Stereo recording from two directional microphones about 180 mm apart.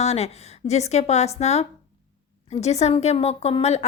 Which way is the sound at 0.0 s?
35° left (ahead or behind).